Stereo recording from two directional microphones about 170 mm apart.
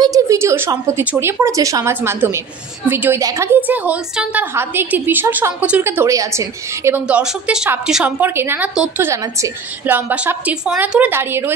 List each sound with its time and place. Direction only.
0.0 s a woman's voice: 20° right (ahead or behind)